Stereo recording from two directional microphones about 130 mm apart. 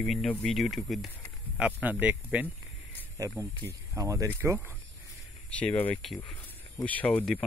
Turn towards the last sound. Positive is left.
turn(degrees=10)  # may be behind; listen again after turning